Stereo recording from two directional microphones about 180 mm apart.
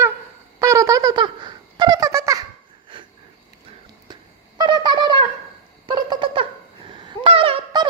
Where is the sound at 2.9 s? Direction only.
25° right (ahead or behind).